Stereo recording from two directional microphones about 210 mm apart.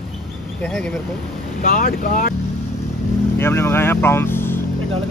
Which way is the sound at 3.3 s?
10° left (ahead or behind).